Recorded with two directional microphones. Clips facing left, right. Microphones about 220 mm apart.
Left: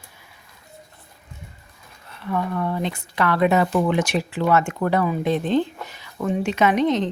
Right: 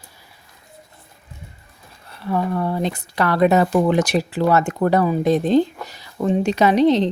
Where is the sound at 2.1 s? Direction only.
35° right (ahead or behind).